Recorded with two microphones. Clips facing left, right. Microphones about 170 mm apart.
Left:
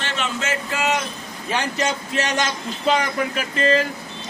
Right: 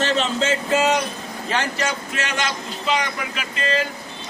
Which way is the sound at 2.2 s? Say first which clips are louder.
Left 4 dB; 40° left (ahead or behind).